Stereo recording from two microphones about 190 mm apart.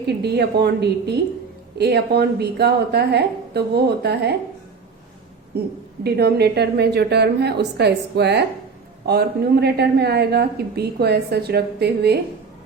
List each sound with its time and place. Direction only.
0.2 s speech: 60° right (ahead or behind)
5.5 s speech: 55° right (ahead or behind)